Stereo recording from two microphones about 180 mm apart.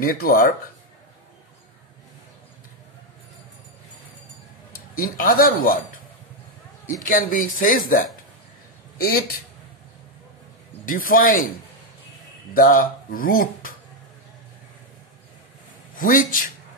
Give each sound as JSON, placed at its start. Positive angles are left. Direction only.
{"t": 0.0, "sound": "speech", "side_deg": 55}
{"t": 4.7, "sound": "a man's voice", "side_deg": 55}
{"t": 7.1, "sound": "speech", "side_deg": 50}
{"t": 10.9, "sound": "speech", "side_deg": 50}
{"t": 12.5, "sound": "speech", "side_deg": 50}
{"t": 16.0, "sound": "speech", "side_deg": 50}